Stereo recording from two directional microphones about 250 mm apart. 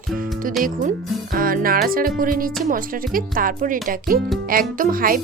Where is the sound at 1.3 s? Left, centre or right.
Right.